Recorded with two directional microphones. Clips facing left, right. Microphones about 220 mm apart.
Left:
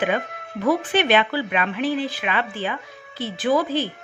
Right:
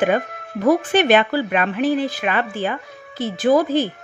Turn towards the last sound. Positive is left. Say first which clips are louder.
# right 5 dB
turn(degrees=-45)  # may be behind; listen again after turning